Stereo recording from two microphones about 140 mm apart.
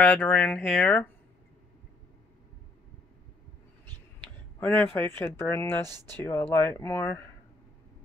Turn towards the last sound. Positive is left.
turn(degrees=15)  # may be behind; listen again after turning